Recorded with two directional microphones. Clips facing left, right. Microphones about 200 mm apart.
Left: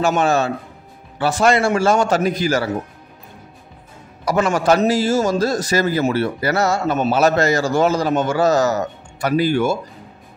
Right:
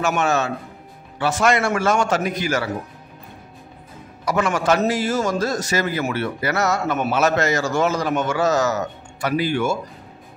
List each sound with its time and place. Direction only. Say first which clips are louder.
0.0 s a man's voice: left 4 dB; 35° left (ahead or behind)
4.3 s a man's voice: left 3 dB; 35° left (ahead or behind)